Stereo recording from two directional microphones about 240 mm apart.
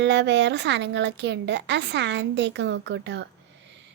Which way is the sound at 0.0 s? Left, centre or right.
Right.